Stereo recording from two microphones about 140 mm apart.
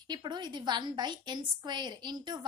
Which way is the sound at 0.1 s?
30° right (ahead or behind).